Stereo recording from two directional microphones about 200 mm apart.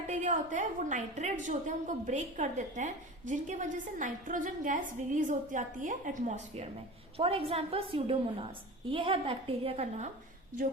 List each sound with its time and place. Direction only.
0.1 s a woman's voice: 40° right (ahead or behind)